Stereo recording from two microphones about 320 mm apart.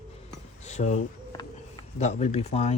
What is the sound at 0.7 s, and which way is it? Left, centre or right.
A man's voice, left.